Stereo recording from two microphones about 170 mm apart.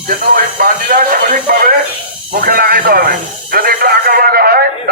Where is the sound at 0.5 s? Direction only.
55° right (ahead or behind).